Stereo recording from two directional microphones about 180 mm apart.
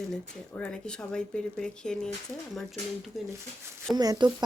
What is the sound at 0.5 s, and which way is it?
Speech, 5° left (ahead or behind).